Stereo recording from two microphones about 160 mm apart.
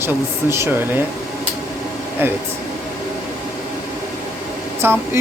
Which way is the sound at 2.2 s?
15° right (ahead or behind).